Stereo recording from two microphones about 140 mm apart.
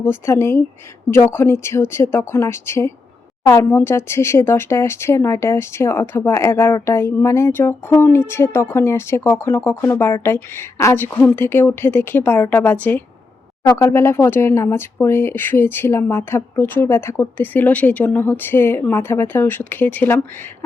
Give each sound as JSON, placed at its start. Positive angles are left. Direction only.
{"t": 0.0, "sound": "speech", "side_deg": 20}